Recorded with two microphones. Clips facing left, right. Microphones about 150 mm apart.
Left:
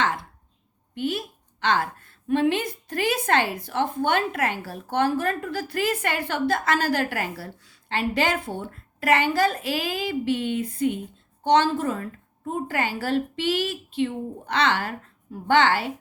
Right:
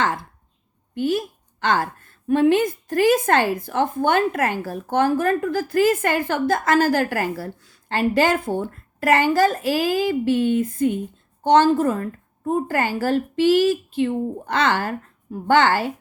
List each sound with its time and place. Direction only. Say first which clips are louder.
0.9 s a woman's voice: right 6 dB; 45° right (ahead or behind)